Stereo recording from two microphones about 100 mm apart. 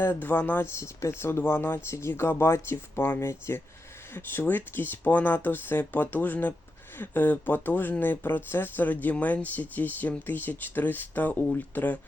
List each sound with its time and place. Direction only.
0.0 s speech: 20° left (ahead or behind)